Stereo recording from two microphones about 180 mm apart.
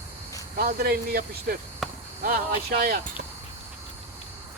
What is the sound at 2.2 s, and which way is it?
Speech, 55° right (ahead or behind).